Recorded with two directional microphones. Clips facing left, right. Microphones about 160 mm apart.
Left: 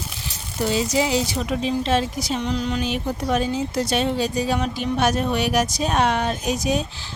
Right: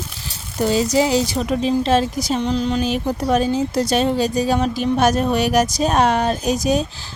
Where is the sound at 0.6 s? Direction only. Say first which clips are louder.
Right 4 dB; 40° right (ahead or behind).